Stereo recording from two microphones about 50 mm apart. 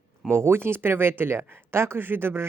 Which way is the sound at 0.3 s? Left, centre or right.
Right.